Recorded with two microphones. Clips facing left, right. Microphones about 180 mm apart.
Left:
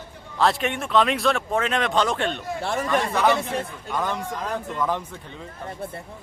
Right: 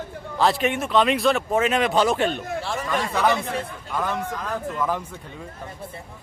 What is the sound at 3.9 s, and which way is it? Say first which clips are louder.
Speech: right 1 dB; 5° right (ahead or behind).